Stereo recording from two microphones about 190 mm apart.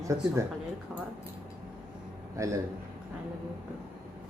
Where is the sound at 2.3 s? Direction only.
15° right (ahead or behind).